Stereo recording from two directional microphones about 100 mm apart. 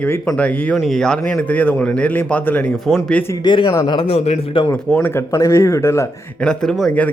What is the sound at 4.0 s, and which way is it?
Speech, 90° left.